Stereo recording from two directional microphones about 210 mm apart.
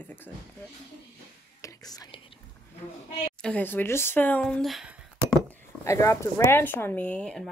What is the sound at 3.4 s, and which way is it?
Speech, 5° left (ahead or behind).